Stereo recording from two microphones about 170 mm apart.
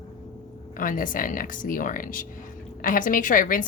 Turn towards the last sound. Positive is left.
turn(degrees=50)  # may be behind; listen again after turning